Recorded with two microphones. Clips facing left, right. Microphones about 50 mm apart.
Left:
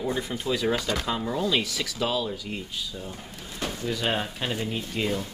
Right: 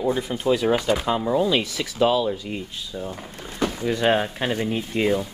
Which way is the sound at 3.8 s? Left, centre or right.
Right.